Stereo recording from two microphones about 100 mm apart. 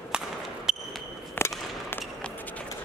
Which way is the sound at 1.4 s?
25° left (ahead or behind).